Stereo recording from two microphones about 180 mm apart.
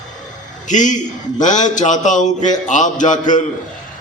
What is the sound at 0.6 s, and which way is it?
A man's voice, 45° left (ahead or behind).